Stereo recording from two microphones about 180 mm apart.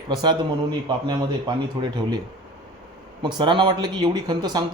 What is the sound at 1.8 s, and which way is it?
Speech, 30° right (ahead or behind).